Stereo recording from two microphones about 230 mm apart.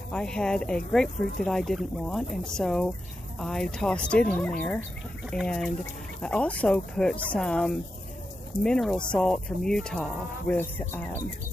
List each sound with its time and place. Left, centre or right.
0.1 s speech: centre
10.5 s insect: centre